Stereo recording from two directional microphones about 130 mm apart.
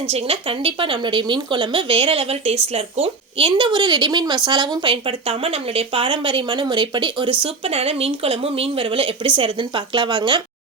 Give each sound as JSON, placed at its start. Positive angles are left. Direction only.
{"t": 0.1, "sound": "speech", "side_deg": -50}
{"t": 7.4, "sound": "a woman's voice", "side_deg": -50}